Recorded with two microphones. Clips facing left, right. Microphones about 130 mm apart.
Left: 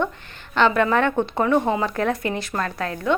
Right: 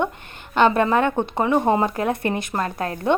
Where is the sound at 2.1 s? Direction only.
30° right (ahead or behind).